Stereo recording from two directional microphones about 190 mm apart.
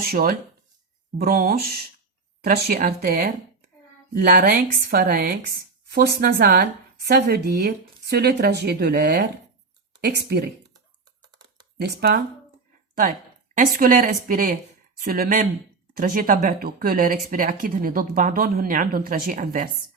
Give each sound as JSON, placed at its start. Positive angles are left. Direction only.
{"t": 0.0, "sound": "speech", "side_deg": -50}
{"t": 11.8, "sound": "speech", "side_deg": -55}
{"t": 13.0, "sound": "a sound", "side_deg": -45}
{"t": 13.7, "sound": "speech", "side_deg": -45}